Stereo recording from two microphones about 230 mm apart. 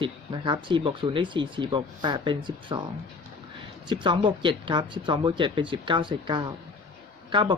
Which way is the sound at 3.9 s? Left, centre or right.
Right.